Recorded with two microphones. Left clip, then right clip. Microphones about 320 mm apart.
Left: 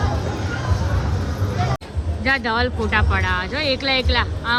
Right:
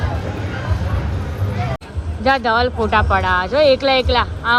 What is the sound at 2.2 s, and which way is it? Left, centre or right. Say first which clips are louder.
Speech: right 5 dB; centre.